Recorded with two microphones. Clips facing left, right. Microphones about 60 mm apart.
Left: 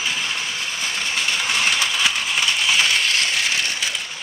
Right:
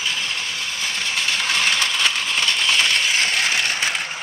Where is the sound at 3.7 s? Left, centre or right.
Right.